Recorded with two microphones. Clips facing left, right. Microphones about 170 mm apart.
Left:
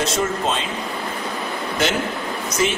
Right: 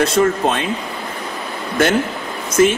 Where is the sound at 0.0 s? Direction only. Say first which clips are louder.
Right 6 dB; 55° right (ahead or behind).